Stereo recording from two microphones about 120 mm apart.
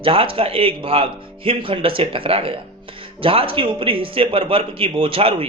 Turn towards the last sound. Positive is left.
turn(degrees=-45)  # may be behind; listen again after turning